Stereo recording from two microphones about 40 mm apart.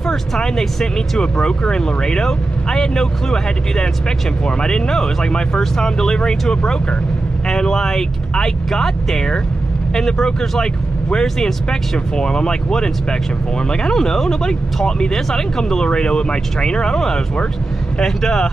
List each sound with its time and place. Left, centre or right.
0.1 s speech: centre